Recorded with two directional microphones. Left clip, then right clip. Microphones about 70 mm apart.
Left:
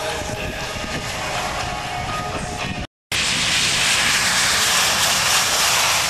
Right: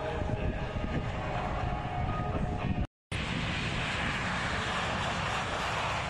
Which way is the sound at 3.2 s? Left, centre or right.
Right.